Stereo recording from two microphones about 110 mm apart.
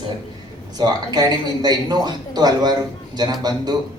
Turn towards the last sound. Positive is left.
turn(degrees=-40)  # may be behind; listen again after turning